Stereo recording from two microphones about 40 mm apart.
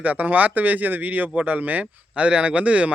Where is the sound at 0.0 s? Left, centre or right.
Right.